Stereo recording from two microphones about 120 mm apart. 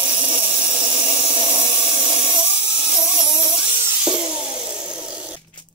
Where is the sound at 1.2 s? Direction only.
5° right (ahead or behind).